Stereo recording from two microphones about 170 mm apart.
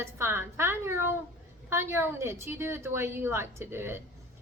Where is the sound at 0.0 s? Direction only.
15° right (ahead or behind).